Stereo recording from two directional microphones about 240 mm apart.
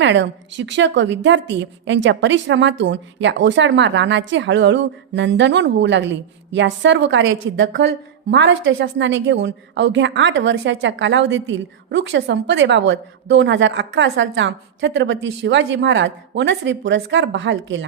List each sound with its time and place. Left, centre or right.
0.0 s a woman's voice: right